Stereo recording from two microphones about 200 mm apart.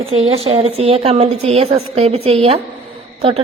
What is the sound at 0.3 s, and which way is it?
A woman's voice, 30° right (ahead or behind).